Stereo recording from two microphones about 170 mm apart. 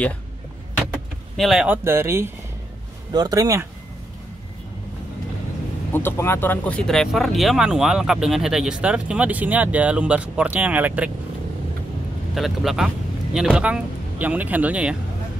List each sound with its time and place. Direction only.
1.3 s speech: centre (ahead or behind)
1.9 s speech: 15° right (ahead or behind)
5.9 s speech: 15° left (ahead or behind); by 11.1 s 10° right (ahead or behind)
12.4 s speech: centre (ahead or behind)